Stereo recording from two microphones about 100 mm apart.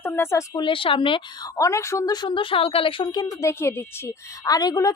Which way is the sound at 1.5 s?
30° left (ahead or behind).